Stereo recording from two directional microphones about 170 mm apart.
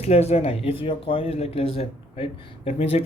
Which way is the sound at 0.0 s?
35° left (ahead or behind).